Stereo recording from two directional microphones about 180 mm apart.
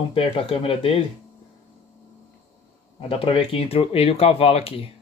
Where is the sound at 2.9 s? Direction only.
30° left (ahead or behind).